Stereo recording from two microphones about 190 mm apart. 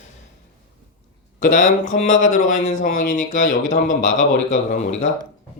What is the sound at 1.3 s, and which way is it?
Speech, 40° left (ahead or behind).